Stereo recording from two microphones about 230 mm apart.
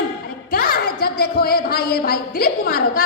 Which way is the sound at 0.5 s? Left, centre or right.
Left.